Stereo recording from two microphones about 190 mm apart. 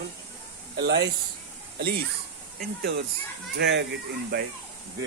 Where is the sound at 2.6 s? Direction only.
60° right (ahead or behind).